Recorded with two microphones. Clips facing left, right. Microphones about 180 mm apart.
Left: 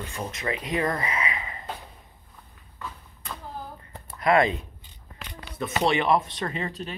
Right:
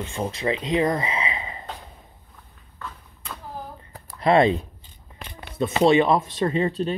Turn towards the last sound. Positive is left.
turn(degrees=-30)  # may be behind; listen again after turning